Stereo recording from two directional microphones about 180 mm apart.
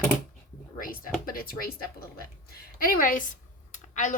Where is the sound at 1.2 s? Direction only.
55° left (ahead or behind).